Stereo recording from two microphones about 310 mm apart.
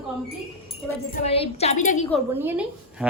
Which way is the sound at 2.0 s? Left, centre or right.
Centre.